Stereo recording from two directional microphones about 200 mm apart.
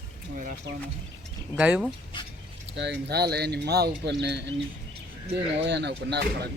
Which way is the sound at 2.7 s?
60° right (ahead or behind).